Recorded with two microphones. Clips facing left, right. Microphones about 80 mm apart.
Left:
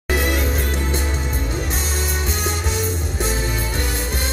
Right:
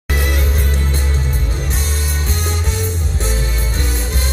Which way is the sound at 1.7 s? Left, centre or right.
Centre.